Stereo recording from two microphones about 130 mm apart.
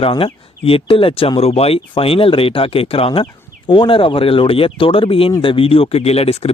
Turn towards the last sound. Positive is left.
turn(degrees=50)  # may be behind; listen again after turning